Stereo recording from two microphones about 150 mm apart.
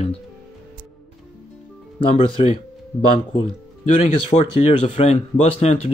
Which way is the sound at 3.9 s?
45° left (ahead or behind).